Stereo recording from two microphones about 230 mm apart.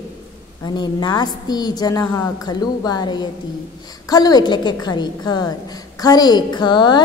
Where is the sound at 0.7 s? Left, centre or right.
Centre.